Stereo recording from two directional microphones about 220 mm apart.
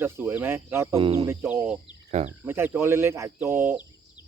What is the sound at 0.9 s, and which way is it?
Speech, 25° right (ahead or behind).